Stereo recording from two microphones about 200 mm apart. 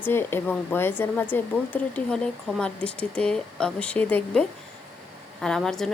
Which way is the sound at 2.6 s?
5° left (ahead or behind).